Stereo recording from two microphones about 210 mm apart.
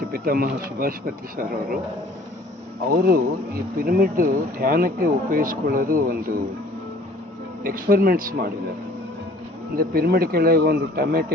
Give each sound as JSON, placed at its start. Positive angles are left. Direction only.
{"t": 0.1, "sound": "speech", "side_deg": -45}
{"t": 2.9, "sound": "speech", "side_deg": -45}
{"t": 7.6, "sound": "speech", "side_deg": -40}
{"t": 9.7, "sound": "speech", "side_deg": -45}